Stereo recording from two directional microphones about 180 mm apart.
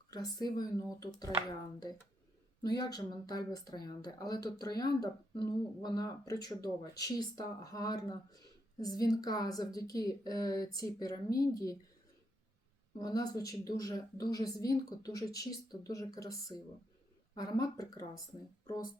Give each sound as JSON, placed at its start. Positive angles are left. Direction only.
{"t": 0.1, "sound": "speech", "side_deg": 20}
{"t": 13.0, "sound": "speech", "side_deg": 20}